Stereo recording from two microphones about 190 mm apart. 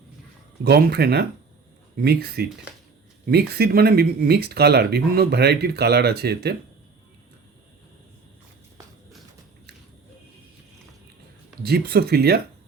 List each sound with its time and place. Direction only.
0.6 s speech: 55° right (ahead or behind)
11.6 s speech: 55° right (ahead or behind)